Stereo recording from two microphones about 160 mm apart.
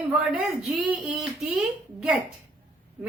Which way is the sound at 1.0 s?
Centre (ahead or behind).